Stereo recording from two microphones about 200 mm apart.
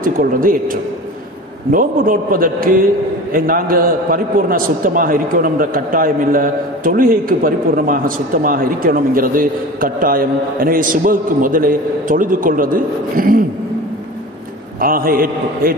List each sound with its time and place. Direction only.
0.0 s a man's voice: 45° right (ahead or behind)
14.8 s a man's voice: 45° right (ahead or behind)